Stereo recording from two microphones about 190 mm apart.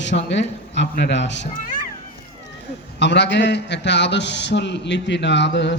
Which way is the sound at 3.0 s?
65° left (ahead or behind).